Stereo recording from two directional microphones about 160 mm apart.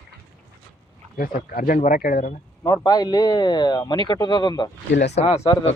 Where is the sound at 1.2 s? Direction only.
60° left (ahead or behind).